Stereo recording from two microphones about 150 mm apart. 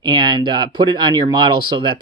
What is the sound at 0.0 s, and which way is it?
Speech, 30° right (ahead or behind).